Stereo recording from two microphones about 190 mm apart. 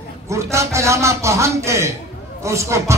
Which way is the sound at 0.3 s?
15° right (ahead or behind).